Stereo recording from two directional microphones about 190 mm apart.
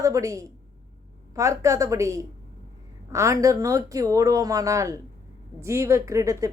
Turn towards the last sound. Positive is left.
turn(degrees=-15)  # may be behind; listen again after turning